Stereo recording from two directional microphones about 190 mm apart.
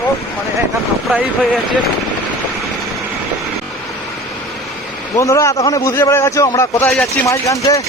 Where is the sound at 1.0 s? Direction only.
Centre (ahead or behind).